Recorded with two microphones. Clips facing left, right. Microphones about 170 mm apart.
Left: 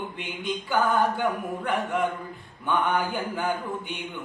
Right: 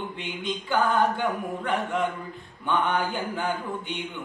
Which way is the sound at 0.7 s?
10° left (ahead or behind).